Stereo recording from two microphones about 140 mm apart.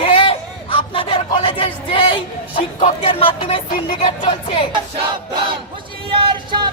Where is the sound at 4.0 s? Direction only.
45° left (ahead or behind).